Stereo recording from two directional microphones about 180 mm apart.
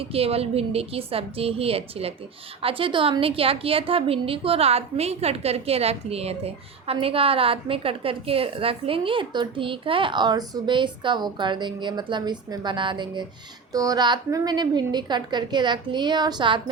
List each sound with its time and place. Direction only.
0.0 s a woman's voice: 35° right (ahead or behind)